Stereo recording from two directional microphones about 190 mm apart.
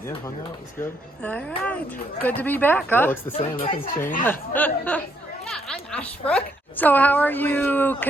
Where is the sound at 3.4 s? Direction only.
30° left (ahead or behind).